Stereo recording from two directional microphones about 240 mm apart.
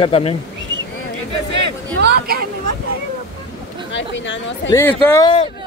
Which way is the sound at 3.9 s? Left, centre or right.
Left.